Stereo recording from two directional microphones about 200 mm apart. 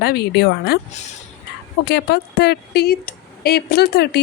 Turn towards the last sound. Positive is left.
turn(degrees=55)  # may be behind; listen again after turning